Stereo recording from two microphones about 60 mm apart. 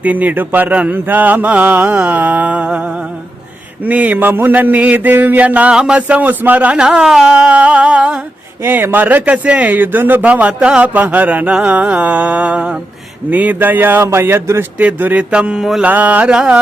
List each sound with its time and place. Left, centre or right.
0.0 s mantra: right
3.8 s mantra: right; by 7.3 s centre
7.3 s a sound: right
8.6 s speech: right
9.3 s mantra: right
13.3 s speech: right
14.0 s speech: right
14.8 s mantra: right